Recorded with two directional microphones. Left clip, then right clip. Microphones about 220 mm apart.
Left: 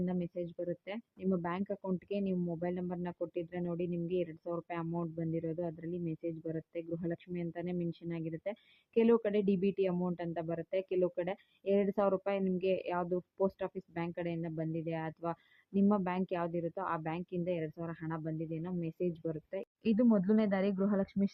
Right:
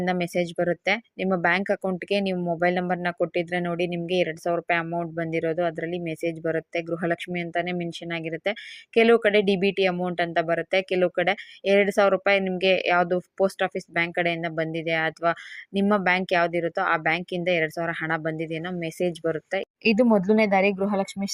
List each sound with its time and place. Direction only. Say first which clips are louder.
0.0 s speech: right 14 dB; 20° right (ahead or behind); by 21.3 s centre (ahead or behind)